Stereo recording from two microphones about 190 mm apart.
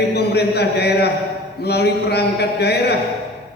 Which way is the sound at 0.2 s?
60° left (ahead or behind).